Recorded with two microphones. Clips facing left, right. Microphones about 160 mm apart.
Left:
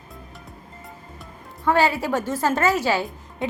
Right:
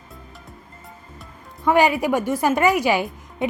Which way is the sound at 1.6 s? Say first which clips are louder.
Right 3 dB; 15° right (ahead or behind).